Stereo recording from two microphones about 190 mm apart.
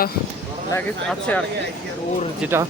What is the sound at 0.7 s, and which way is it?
Speech, 10° left (ahead or behind).